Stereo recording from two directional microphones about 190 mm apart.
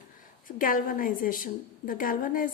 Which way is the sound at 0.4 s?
45° left (ahead or behind).